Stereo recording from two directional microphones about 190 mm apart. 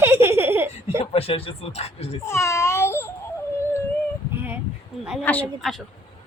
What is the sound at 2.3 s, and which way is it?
Babbling, 15° left (ahead or behind).